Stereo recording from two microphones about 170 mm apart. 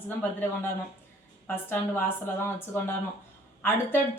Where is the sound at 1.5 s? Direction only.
10° left (ahead or behind).